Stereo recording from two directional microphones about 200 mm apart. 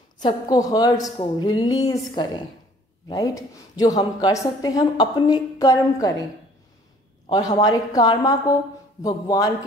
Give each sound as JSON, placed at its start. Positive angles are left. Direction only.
{"t": 0.2, "sound": "a woman's voice", "side_deg": 20}
{"t": 7.2, "sound": "a woman's voice", "side_deg": 20}